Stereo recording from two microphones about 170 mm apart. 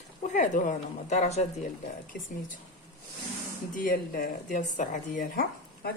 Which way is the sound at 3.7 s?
60° left (ahead or behind).